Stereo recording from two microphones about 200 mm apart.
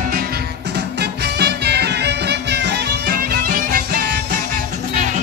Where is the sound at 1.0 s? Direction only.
55° right (ahead or behind).